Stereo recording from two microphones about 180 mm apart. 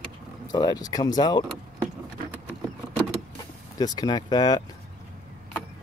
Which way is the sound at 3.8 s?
20° left (ahead or behind).